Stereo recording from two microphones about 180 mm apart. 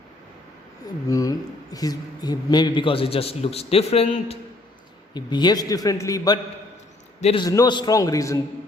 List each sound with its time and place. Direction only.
1.0 s a man's voice: 20° left (ahead or behind)
7.2 s a man's voice: 35° left (ahead or behind)
7.4 s a man's voice: 20° left (ahead or behind)